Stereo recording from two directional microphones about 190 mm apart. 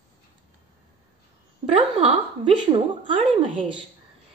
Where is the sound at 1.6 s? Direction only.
30° right (ahead or behind).